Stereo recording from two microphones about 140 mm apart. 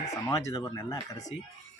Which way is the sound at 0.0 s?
25° left (ahead or behind).